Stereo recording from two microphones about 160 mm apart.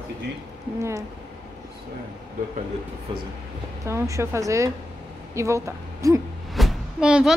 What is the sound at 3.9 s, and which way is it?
A woman's voice, 15° right (ahead or behind).